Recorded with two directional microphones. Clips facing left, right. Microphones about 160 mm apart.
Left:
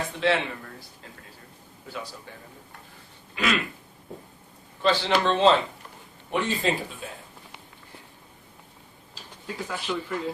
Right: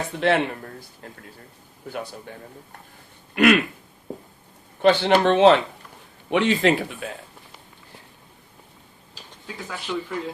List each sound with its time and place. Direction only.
0.2 s a sound: 50° right (ahead or behind)
1.9 s speech: 55° right (ahead or behind)
3.3 s speech: 60° right (ahead or behind)
4.8 s speech: 60° right (ahead or behind)
6.3 s speech: 80° right
9.6 s speech: centre (ahead or behind)